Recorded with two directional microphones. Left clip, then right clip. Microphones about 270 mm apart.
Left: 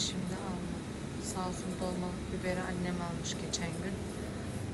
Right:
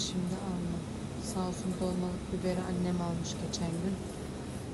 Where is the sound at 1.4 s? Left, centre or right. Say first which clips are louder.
Right 2 dB; right.